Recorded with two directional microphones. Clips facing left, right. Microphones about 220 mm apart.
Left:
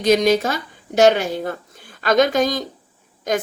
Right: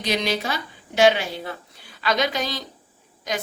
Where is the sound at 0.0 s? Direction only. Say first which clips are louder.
Left 9 dB; 45° left (ahead or behind).